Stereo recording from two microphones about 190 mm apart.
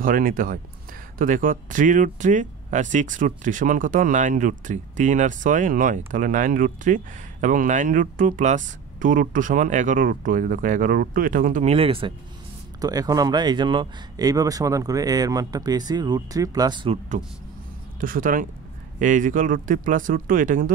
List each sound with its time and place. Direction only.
0.0 s speech: 45° right (ahead or behind); by 12.1 s 30° right (ahead or behind)
12.8 s speech: 20° right (ahead or behind)
18.0 s speech: 45° right (ahead or behind)